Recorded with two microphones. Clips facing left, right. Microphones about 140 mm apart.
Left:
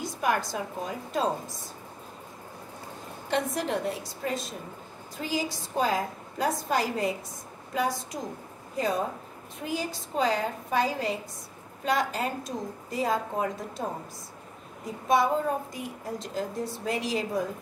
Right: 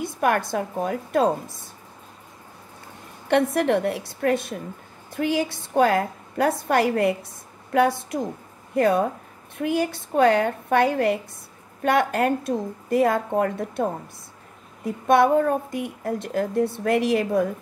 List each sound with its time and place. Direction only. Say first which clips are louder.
0.0 s a woman's voice: right 5 dB; 60° right (ahead or behind)
3.3 s a woman's voice: right 9 dB; 65° right (ahead or behind)
15.0 s a woman's voice: right 7 dB; 60° right (ahead or behind)